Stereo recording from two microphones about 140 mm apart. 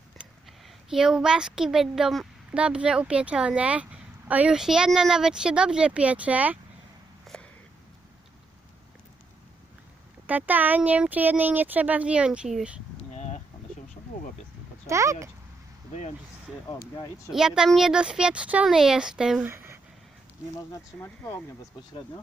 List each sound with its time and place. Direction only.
0.9 s a woman's voice: 5° right (ahead or behind)
7.3 s a sound: 5° left (ahead or behind)
10.2 s speech: 10° right (ahead or behind)
13.1 s a sound: 55° left (ahead or behind)
14.8 s speech: 20° right (ahead or behind)
17.3 s a woman's voice: 5° right (ahead or behind)
20.6 s speech: 20° left (ahead or behind)